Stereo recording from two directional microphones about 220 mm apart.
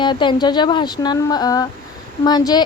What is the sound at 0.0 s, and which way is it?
Speech, 20° left (ahead or behind).